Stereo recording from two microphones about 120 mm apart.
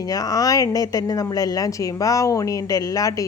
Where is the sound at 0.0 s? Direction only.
30° left (ahead or behind).